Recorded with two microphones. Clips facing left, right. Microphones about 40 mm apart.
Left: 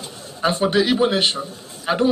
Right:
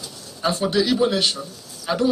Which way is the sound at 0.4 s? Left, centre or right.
Left.